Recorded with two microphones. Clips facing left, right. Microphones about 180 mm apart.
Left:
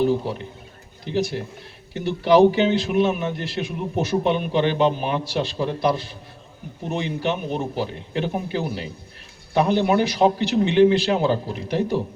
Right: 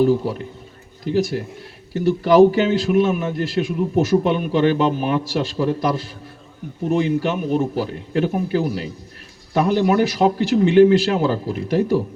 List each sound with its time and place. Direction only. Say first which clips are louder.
1.0 s a man's voice: right 4 dB; 45° right (ahead or behind)